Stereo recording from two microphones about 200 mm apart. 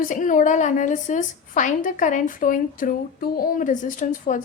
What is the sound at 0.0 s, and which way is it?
A woman's voice, 40° left (ahead or behind).